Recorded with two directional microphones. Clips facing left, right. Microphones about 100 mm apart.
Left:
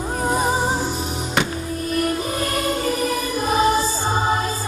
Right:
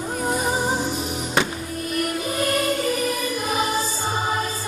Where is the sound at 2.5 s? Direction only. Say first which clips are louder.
Right 1 dB; 35° left (ahead or behind).